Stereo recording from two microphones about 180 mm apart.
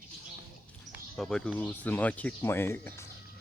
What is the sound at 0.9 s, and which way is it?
Speech, centre (ahead or behind).